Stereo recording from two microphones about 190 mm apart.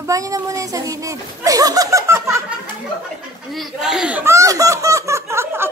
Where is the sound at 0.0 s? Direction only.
15° right (ahead or behind).